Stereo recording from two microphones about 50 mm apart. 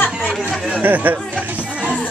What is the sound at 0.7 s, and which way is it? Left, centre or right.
Chatter, right.